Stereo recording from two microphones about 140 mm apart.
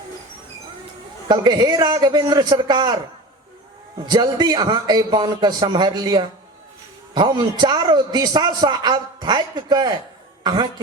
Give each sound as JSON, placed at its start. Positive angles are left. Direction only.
{"t": 1.3, "sound": "a man's voice", "side_deg": -30}
{"t": 4.0, "sound": "a man's voice", "side_deg": -30}